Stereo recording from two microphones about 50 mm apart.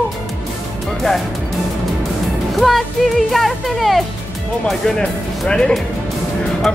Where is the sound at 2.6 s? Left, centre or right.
Centre.